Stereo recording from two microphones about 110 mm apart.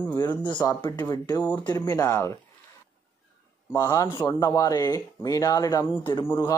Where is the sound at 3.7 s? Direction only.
30° left (ahead or behind).